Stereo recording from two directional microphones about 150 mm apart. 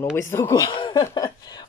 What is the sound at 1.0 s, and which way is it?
Speech, 25° left (ahead or behind).